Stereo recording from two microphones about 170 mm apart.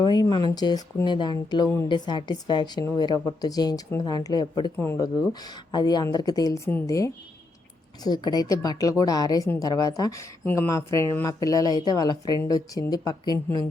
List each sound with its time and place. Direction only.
0.0 s speech: 25° left (ahead or behind)